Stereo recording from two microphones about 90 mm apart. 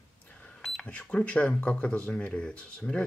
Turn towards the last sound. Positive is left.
turn(degrees=10)  # may be behind; listen again after turning